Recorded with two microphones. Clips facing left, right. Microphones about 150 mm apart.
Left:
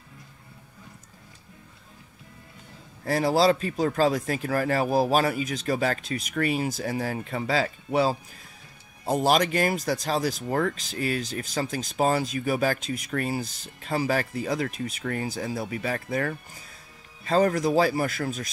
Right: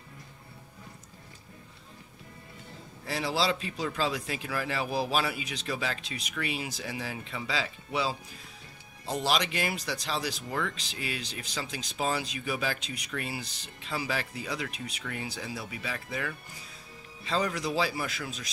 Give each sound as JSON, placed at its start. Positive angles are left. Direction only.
{"t": 3.1, "sound": "speech", "side_deg": 45}